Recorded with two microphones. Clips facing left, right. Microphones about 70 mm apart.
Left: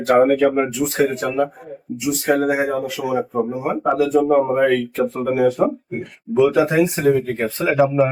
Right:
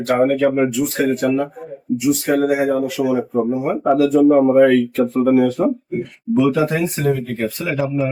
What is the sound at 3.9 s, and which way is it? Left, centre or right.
Speech, centre.